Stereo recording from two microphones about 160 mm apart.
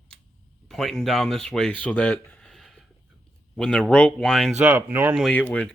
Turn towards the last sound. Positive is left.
turn(degrees=10)  # may be behind; listen again after turning